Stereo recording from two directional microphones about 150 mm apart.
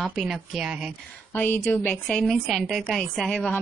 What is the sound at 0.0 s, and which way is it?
Speech, centre (ahead or behind).